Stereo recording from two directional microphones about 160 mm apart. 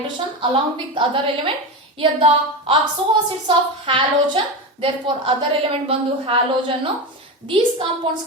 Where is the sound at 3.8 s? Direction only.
35° right (ahead or behind).